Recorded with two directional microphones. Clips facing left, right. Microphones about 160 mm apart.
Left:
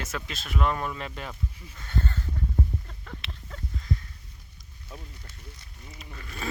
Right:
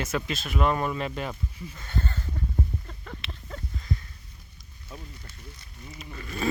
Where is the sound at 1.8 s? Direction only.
15° right (ahead or behind).